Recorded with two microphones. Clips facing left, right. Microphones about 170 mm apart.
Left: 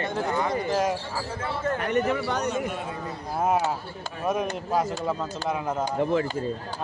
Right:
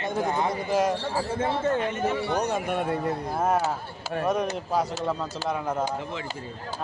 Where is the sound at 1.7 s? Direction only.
65° left (ahead or behind).